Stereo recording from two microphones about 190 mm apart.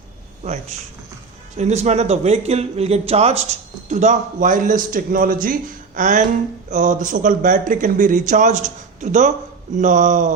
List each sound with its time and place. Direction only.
1.5 s speech: 35° right (ahead or behind)